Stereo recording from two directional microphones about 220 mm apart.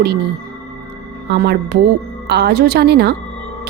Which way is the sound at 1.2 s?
45° right (ahead or behind).